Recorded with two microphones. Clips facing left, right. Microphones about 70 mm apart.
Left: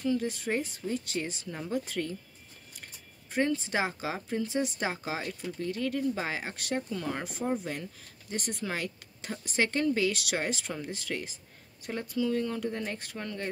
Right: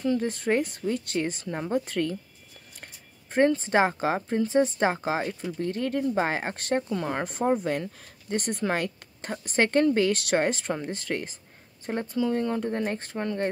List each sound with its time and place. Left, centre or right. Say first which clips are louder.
0.0 s speech: right 4 dB; right